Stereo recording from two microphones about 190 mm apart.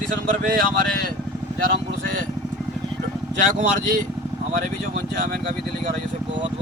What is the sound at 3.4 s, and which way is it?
Speech, 45° right (ahead or behind).